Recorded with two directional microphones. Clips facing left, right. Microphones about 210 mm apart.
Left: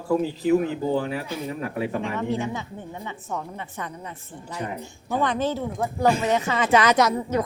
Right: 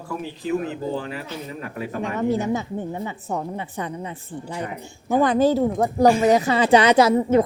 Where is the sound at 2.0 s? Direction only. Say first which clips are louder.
Right 4 dB; 40° right (ahead or behind).